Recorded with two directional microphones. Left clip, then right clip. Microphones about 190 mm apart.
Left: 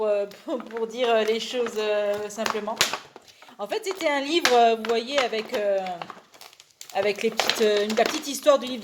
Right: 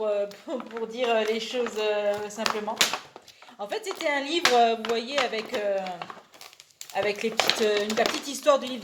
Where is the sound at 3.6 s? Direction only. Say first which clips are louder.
Left 3 dB; 40° left (ahead or behind).